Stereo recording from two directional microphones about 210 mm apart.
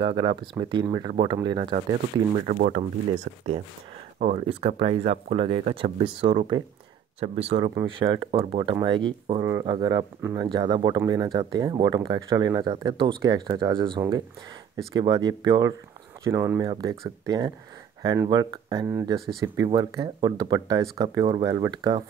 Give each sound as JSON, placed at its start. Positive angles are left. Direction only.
{"t": 0.0, "sound": "speech", "side_deg": -25}
{"t": 2.4, "sound": "speech", "side_deg": -45}
{"t": 4.2, "sound": "speech", "side_deg": -30}